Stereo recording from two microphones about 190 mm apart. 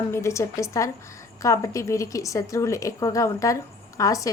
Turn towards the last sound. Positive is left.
turn(degrees=15)  # may be behind; listen again after turning